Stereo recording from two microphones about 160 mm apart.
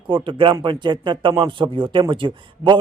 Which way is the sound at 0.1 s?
30° right (ahead or behind).